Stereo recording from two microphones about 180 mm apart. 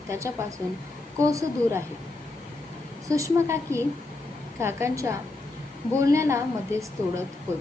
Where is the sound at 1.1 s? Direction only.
15° right (ahead or behind).